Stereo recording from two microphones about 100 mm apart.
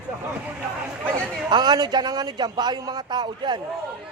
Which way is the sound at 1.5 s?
45° right (ahead or behind).